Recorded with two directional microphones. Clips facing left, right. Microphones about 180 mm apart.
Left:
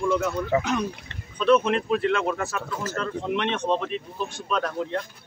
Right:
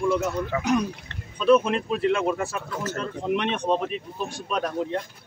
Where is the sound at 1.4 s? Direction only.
5° right (ahead or behind).